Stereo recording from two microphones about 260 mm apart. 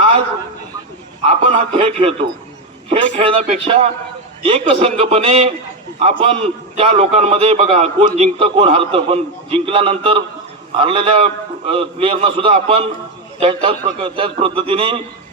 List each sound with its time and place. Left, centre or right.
1.3 s a man's voice: right